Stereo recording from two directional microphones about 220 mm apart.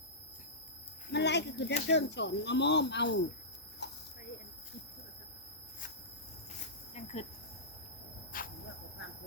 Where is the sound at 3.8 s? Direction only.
50° left (ahead or behind).